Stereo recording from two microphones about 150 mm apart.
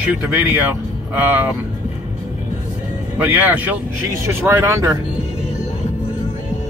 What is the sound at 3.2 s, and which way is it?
A man's voice, 10° right (ahead or behind).